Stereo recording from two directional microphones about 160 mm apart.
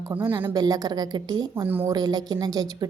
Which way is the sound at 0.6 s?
25° right (ahead or behind).